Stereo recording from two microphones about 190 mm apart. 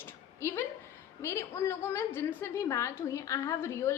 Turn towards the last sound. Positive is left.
turn(degrees=15)  # may be behind; listen again after turning